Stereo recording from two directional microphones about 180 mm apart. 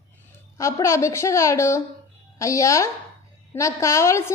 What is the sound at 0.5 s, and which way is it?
A woman's voice, 15° left (ahead or behind).